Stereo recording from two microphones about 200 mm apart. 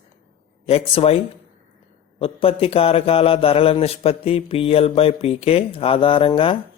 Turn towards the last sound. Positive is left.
turn(degrees=25)  # may be behind; listen again after turning